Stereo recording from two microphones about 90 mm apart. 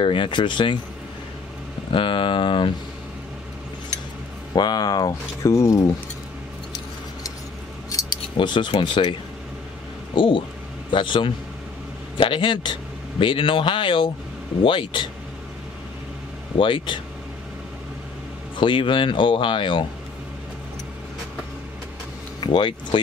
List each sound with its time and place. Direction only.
0.0 s speech: 65° left (ahead or behind)
1.9 s speech: 70° left (ahead or behind)
4.6 s speech: 50° left (ahead or behind)
7.9 s keys jangling: 40° left (ahead or behind)
8.4 s speech: 60° left (ahead or behind)
10.1 s speech: 70° left (ahead or behind)
16.5 s speech: 70° left (ahead or behind)
18.6 s speech: 65° left (ahead or behind)
22.4 s speech: 60° left (ahead or behind)